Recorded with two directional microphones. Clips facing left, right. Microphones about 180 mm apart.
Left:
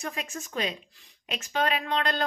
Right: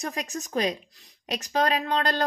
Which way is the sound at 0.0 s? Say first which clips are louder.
Right 3 dB; 40° right (ahead or behind).